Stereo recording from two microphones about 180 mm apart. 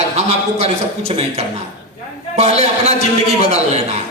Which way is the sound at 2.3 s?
35° right (ahead or behind).